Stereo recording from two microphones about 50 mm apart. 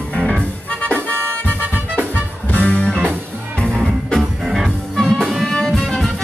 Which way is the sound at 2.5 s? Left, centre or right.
Left.